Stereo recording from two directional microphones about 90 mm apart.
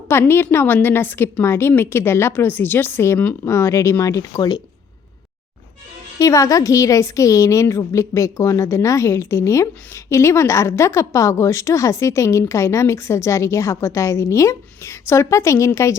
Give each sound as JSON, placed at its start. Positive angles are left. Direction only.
{"t": 0.1, "sound": "a woman's voice", "side_deg": 25}
{"t": 6.1, "sound": "a woman's voice", "side_deg": 40}